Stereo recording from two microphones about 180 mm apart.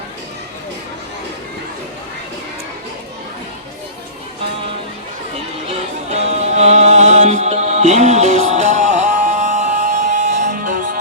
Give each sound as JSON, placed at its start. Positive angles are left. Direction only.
{"t": 6.1, "sound": "music", "side_deg": -40}